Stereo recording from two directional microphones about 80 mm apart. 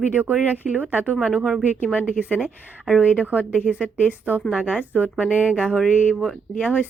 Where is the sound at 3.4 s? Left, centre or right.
Centre.